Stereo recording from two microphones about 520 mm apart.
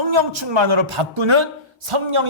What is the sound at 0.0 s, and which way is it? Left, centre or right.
A man's voice, right.